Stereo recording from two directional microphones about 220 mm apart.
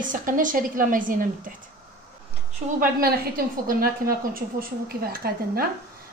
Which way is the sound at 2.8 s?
40° right (ahead or behind).